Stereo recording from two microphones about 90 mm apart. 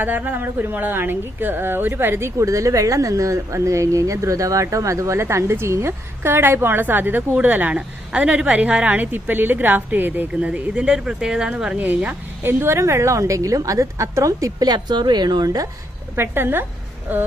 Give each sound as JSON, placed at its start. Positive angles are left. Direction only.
{"t": 0.0, "sound": "a woman's voice", "side_deg": -20}
{"t": 16.1, "sound": "speech", "side_deg": -25}